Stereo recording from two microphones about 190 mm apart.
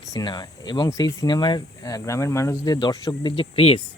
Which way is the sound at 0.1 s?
20° left (ahead or behind).